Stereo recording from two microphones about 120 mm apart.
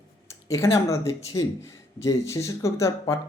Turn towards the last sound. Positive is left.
turn(degrees=25)  # may be behind; listen again after turning